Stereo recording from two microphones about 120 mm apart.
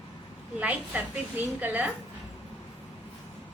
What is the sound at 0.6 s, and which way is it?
A woman's voice, 10° right (ahead or behind).